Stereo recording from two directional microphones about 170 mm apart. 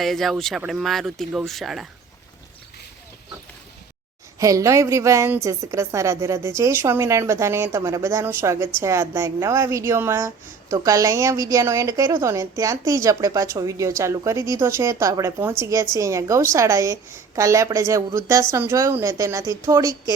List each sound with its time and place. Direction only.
0.0 s speech: centre (ahead or behind)
4.4 s a woman's voice: 20° right (ahead or behind)